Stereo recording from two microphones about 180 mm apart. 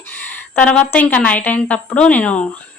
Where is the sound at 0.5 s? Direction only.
10° left (ahead or behind).